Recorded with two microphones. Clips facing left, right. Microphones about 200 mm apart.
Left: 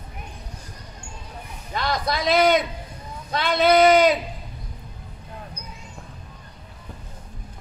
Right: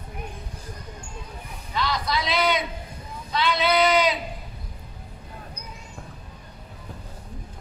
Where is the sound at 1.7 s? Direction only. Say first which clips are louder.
Left 1 dB; 50° left (ahead or behind).